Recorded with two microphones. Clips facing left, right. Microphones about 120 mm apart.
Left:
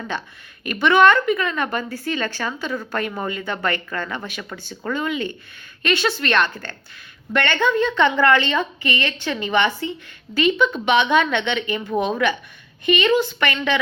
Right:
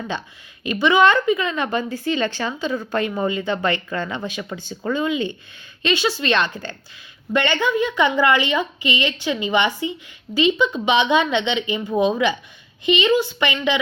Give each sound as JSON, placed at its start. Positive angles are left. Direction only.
{"t": 0.6, "sound": "a woman's voice", "side_deg": -15}